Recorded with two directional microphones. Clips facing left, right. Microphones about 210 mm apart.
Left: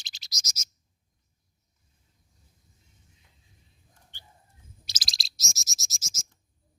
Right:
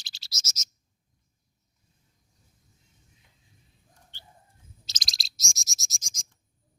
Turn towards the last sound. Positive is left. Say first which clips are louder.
# left 2 dB
turn(degrees=5)  # may be behind; listen again after turning